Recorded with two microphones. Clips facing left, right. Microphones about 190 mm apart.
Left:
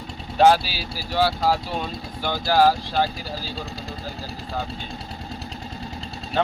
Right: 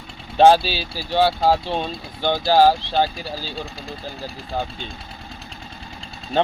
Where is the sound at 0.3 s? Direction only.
25° right (ahead or behind).